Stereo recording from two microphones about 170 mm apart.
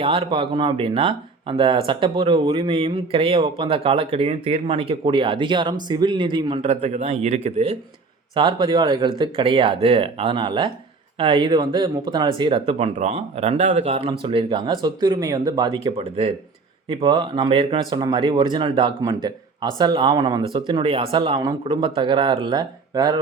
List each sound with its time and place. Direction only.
0.0 s speech: 35° right (ahead or behind)
8.4 s speech: 25° right (ahead or behind)